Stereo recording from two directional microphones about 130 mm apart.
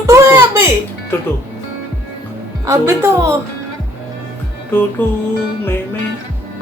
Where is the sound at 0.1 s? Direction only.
20° right (ahead or behind).